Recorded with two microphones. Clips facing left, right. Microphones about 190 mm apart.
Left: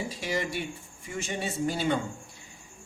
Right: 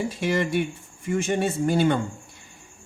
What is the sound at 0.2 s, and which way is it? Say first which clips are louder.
Speech: right 9 dB; 55° right (ahead or behind).